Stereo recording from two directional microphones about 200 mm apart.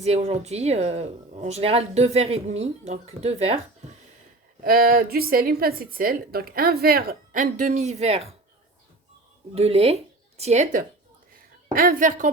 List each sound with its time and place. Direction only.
0.0 s speech: 30° right (ahead or behind)
4.6 s a woman's voice: 45° right (ahead or behind); by 8.4 s 30° right (ahead or behind)
9.6 s speech: 30° right (ahead or behind)
11.7 s speech: 45° right (ahead or behind)